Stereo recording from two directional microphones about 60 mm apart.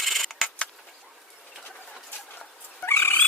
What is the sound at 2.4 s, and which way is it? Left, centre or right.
Dog, left.